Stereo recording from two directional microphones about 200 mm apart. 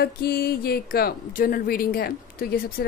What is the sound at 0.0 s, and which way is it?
Speech, 50° left (ahead or behind).